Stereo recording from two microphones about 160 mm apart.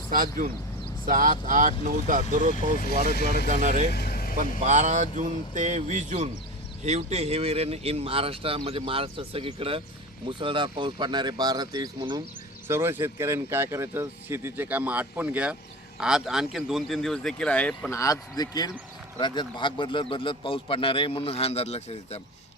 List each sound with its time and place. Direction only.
0.1 s speech: 60° right (ahead or behind)
3.9 s vehicle: 75° left (ahead or behind)
4.6 s speech: 50° right (ahead or behind); by 12.2 s 25° right (ahead or behind)
12.6 s speech: 15° right (ahead or behind); by 17.9 s 5° left (ahead or behind)
17.9 s a man's voice: 20° left (ahead or behind); by 22.2 s 40° left (ahead or behind)